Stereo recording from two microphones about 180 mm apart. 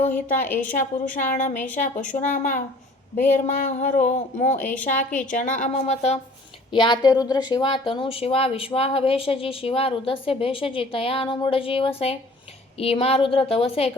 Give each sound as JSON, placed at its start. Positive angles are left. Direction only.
{"t": 0.1, "sound": "a woman's voice", "side_deg": 10}
{"t": 0.7, "sound": "speech", "side_deg": 45}
{"t": 6.7, "sound": "speech", "side_deg": 25}